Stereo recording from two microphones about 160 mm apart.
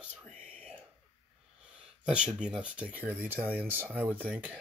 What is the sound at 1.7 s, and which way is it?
Speech, 5° right (ahead or behind).